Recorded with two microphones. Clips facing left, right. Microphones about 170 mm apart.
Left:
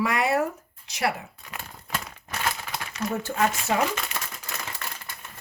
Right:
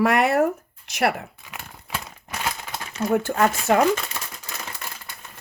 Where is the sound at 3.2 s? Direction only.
55° right (ahead or behind).